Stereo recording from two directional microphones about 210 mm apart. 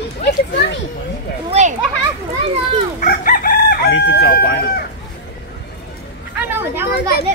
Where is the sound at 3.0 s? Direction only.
40° left (ahead or behind).